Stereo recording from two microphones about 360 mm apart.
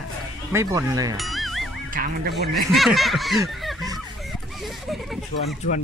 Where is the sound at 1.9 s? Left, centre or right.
Right.